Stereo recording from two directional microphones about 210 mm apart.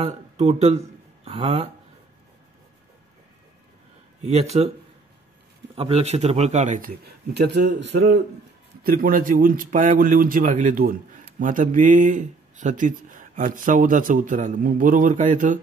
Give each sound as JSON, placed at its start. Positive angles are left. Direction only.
{"t": 0.0, "sound": "speech", "side_deg": -30}
{"t": 4.2, "sound": "speech", "side_deg": -30}
{"t": 5.8, "sound": "a man's voice", "side_deg": -30}
{"t": 7.3, "sound": "a man's voice", "side_deg": -50}